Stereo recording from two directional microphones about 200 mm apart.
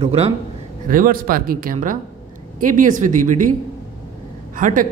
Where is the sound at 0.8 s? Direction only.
45° right (ahead or behind).